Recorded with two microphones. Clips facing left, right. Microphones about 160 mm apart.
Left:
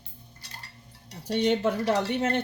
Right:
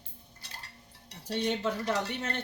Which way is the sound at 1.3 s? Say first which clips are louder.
Left 6 dB; 70° left (ahead or behind).